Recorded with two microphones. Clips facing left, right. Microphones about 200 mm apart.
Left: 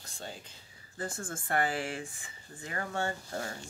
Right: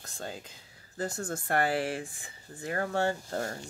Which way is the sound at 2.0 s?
50° right (ahead or behind).